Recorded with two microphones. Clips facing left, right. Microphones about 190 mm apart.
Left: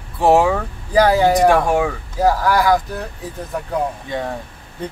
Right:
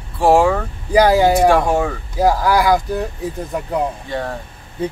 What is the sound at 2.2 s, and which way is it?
Speech, 10° right (ahead or behind).